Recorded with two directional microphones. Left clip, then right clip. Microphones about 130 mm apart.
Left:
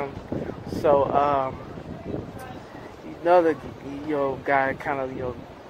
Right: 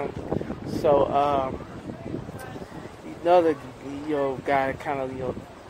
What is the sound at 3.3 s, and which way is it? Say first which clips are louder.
Speech: left 1 dB; 20° right (ahead or behind).